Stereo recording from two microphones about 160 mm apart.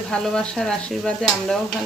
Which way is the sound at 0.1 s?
5° left (ahead or behind).